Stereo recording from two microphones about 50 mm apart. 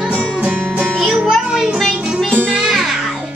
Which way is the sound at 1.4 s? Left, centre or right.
Centre.